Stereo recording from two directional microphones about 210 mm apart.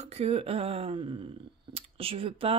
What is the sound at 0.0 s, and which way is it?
Speech, 30° right (ahead or behind).